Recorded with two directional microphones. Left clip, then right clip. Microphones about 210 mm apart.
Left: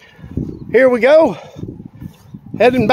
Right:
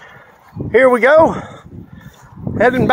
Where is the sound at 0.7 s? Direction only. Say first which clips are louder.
Even; 20° left (ahead or behind).